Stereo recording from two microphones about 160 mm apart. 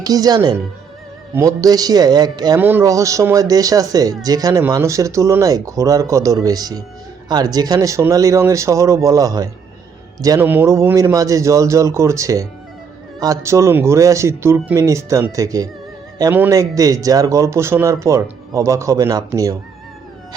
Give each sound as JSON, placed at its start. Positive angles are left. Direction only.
{"t": 0.0, "sound": "speech", "side_deg": -25}
{"t": 2.6, "sound": "speech", "side_deg": -10}